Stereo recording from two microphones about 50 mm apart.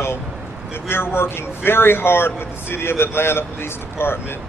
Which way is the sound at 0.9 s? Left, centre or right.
Left.